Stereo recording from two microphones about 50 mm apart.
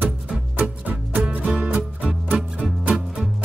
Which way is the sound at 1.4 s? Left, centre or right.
Centre.